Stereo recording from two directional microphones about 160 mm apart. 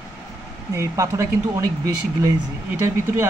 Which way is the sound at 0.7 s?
20° right (ahead or behind).